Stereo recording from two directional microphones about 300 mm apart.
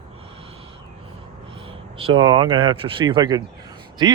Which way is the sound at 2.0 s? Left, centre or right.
Centre.